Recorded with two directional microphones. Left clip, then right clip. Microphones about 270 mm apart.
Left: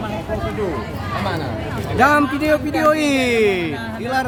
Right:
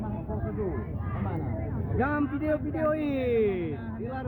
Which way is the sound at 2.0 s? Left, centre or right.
Left.